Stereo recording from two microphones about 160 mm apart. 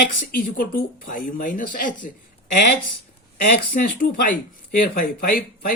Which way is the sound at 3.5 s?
60° left (ahead or behind).